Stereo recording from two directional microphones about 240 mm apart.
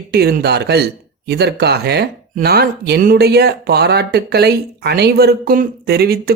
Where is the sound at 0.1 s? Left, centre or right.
Right.